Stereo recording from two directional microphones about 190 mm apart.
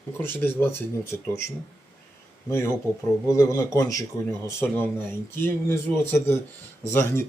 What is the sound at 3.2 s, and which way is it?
Speech, 15° left (ahead or behind).